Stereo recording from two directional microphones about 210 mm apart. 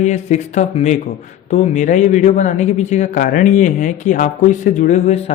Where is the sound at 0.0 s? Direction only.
35° left (ahead or behind).